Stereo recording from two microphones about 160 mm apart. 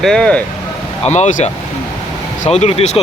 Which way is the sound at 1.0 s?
45° left (ahead or behind).